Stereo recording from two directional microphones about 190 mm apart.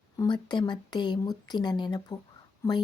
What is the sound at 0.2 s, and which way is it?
A woman's voice, 25° left (ahead or behind).